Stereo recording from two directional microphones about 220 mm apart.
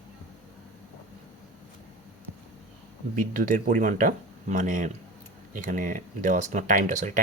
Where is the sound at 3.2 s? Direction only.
40° right (ahead or behind).